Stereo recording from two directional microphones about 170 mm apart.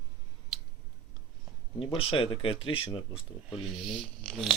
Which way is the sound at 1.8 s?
35° left (ahead or behind).